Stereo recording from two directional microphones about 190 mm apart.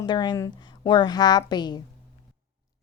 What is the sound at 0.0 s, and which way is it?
A woman's voice, 25° left (ahead or behind).